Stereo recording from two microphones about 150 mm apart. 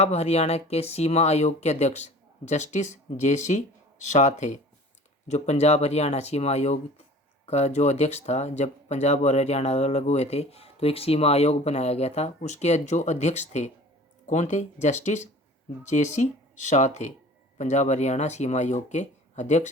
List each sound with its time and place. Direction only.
0.0 s speech: 45° left (ahead or behind)